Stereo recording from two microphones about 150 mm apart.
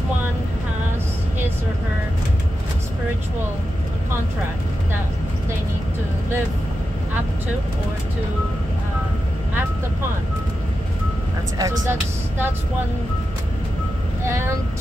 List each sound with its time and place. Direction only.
11.5 s speech: 20° right (ahead or behind)
14.2 s speech: 15° right (ahead or behind)